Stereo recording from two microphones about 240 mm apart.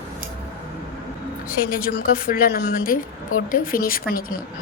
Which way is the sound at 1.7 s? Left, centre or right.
Left.